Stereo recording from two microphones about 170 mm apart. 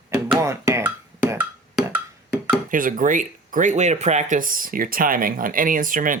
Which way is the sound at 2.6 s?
55° right (ahead or behind).